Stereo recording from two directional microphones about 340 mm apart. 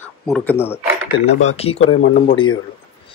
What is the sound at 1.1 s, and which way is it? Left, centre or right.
Speech, centre.